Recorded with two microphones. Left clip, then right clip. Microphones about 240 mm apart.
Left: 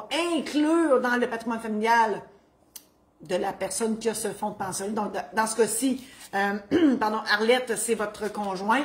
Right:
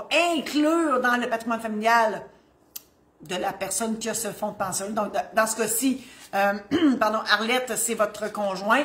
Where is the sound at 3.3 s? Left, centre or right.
Centre.